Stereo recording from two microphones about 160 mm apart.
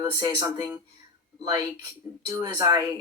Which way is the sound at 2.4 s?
25° right (ahead or behind).